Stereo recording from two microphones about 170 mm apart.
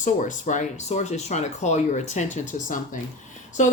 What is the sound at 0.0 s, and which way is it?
Speech, 45° left (ahead or behind).